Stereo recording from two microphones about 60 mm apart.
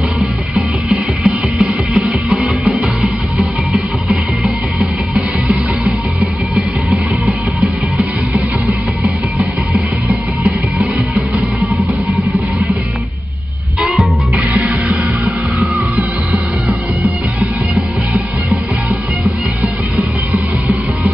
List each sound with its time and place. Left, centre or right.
0.2 s music: centre
8.6 s music: centre
13.7 s music: centre
14.3 s music: right
17.4 s music: right